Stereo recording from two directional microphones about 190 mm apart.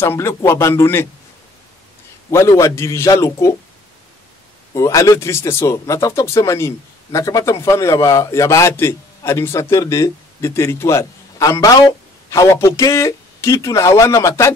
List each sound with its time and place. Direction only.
0.0 s speech: 15° left (ahead or behind)
2.3 s speech: 15° left (ahead or behind)
4.7 s speech: 15° left (ahead or behind)